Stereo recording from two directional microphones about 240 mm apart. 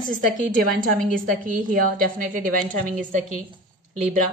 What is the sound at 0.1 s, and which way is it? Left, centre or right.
A woman's voice, right.